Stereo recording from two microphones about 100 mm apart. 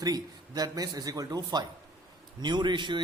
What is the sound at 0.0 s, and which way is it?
A man's voice, 40° right (ahead or behind).